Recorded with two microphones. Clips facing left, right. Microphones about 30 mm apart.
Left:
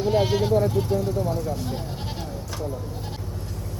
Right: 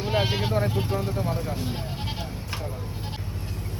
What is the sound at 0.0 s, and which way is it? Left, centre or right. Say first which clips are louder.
Speech: left 4 dB; right.